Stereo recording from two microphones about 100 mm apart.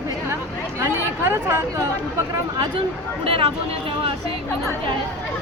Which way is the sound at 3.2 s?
70° right (ahead or behind).